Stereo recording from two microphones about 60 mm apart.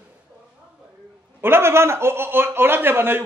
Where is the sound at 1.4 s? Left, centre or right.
Right.